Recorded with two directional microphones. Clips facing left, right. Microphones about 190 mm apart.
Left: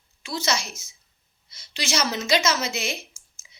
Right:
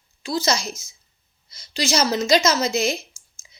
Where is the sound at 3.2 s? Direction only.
35° right (ahead or behind).